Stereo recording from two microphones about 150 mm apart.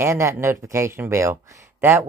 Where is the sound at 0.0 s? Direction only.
20° right (ahead or behind).